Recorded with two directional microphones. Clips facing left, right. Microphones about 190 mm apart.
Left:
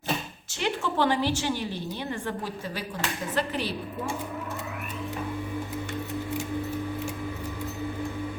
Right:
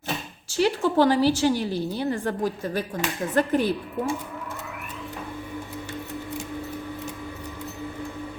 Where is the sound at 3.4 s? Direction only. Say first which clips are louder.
Right 8 dB; 50° right (ahead or behind).